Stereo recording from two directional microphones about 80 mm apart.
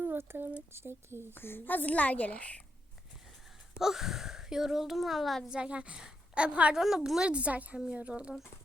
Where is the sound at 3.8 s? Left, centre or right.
Centre.